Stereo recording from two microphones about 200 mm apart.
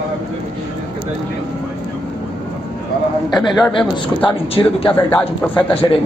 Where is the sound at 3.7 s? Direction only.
25° left (ahead or behind).